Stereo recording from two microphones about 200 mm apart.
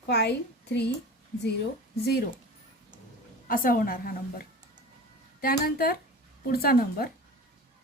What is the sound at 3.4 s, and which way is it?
A woman's voice, 45° left (ahead or behind).